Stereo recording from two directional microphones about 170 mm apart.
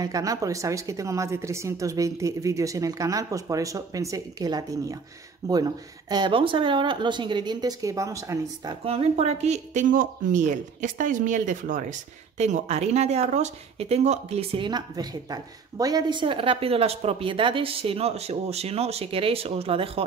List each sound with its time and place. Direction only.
0.0 s a woman's voice: 20° right (ahead or behind)
8.8 s speech: 35° right (ahead or behind)